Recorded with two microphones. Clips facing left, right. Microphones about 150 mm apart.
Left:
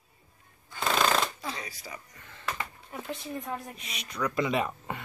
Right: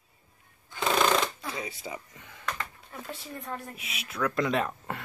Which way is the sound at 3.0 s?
15° left (ahead or behind).